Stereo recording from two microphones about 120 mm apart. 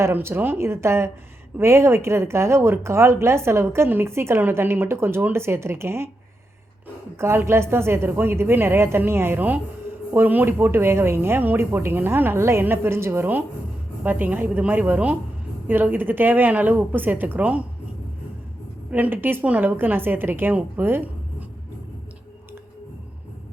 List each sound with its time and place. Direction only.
0.0 s a woman's voice: 20° right (ahead or behind)
7.2 s a woman's voice: 20° right (ahead or behind)
18.9 s a woman's voice: 15° right (ahead or behind)